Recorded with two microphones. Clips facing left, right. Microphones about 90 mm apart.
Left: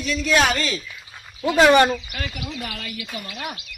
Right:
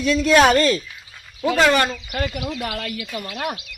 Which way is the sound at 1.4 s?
5° left (ahead or behind).